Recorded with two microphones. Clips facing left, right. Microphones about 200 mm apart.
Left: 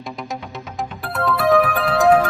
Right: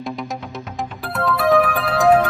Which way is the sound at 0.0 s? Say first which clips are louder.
Right 2 dB; centre (ahead or behind).